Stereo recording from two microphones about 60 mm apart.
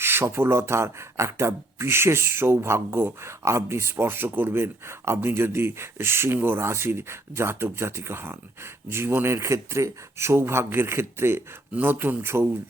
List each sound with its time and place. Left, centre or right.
0.0 s speech: right
11.7 s speech: right